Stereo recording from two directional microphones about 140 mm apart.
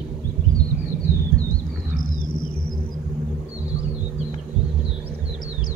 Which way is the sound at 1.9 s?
85° left.